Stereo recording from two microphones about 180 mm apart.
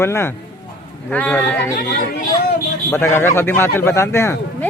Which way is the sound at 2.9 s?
15° left (ahead or behind).